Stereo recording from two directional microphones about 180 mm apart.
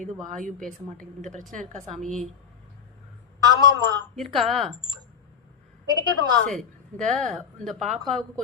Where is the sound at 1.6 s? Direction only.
40° right (ahead or behind).